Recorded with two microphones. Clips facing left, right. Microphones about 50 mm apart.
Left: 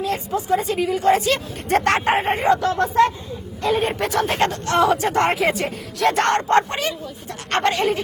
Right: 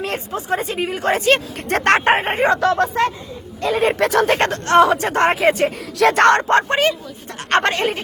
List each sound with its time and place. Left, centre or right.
0.3 s a woman's voice: right
3.6 s speech: right
4.4 s speech: right
6.0 s speech: right
6.5 s speech: right